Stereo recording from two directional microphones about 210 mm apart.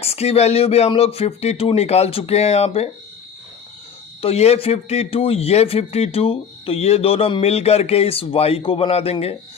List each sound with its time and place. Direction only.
0.0 s speech: 30° left (ahead or behind)
4.2 s speech: 30° left (ahead or behind)